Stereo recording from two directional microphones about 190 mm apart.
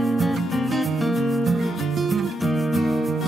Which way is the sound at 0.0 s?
Centre (ahead or behind).